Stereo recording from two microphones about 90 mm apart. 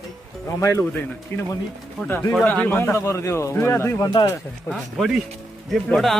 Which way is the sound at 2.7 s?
25° left (ahead or behind).